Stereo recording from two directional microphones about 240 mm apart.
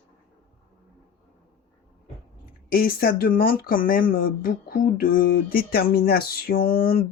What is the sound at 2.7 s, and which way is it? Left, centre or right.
Speech, left.